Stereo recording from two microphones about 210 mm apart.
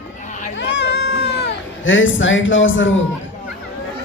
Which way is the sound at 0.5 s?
55° left (ahead or behind).